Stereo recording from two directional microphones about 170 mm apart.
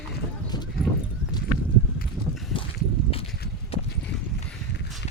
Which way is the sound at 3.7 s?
35° left (ahead or behind).